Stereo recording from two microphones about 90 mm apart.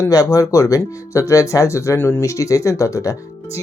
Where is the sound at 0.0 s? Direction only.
40° left (ahead or behind).